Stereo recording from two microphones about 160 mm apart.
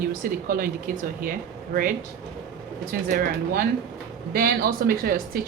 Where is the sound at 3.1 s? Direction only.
70° right (ahead or behind).